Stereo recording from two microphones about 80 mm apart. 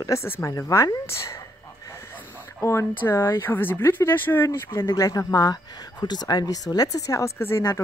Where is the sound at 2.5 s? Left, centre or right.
Left.